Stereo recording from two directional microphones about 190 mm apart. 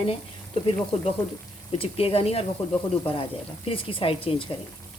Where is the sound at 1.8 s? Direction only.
30° left (ahead or behind).